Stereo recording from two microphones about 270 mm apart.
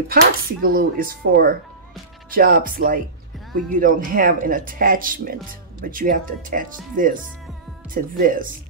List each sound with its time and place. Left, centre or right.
0.1 s speech: right